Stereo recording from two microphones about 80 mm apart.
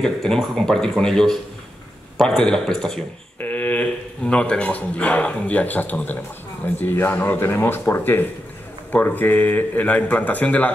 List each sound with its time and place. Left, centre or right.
0.0 s speech: centre
3.3 s speech: left